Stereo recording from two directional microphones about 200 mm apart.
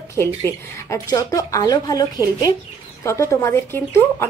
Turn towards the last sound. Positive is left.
turn(degrees=10)  # may be behind; listen again after turning